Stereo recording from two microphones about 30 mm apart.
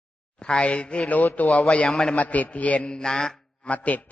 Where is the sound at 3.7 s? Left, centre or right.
Left.